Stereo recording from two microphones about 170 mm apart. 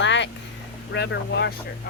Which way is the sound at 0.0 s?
90° left.